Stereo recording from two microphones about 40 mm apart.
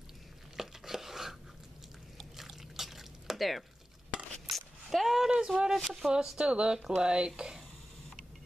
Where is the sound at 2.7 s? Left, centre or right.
Centre.